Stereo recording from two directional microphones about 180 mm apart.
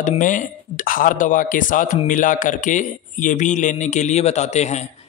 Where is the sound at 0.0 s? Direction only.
45° left (ahead or behind).